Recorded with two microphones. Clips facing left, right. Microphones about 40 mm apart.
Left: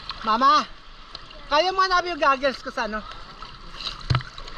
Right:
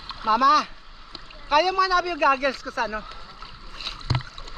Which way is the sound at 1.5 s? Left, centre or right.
Right.